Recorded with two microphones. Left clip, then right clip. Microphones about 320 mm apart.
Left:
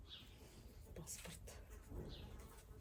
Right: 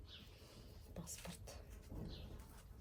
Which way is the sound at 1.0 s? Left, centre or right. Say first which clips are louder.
Right 1 dB; centre.